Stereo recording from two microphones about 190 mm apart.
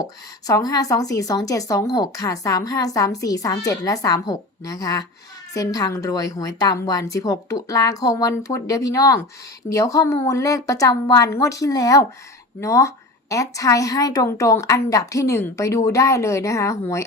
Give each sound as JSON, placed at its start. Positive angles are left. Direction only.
{"t": 0.4, "sound": "a woman's voice", "side_deg": 20}